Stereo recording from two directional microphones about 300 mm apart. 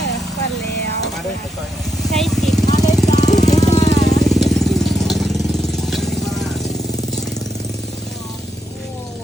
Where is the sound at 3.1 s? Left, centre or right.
Left.